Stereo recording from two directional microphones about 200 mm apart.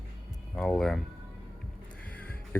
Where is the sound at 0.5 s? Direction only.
5° left (ahead or behind).